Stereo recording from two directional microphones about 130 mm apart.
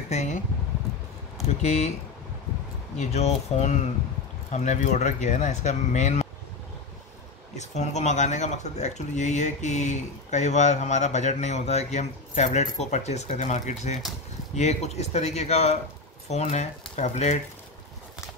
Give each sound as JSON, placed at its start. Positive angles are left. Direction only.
{"t": 0.1, "sound": "a sound", "side_deg": 60}
{"t": 1.6, "sound": "speech", "side_deg": 60}
{"t": 3.0, "sound": "speech", "side_deg": 55}
{"t": 7.5, "sound": "speech", "side_deg": 65}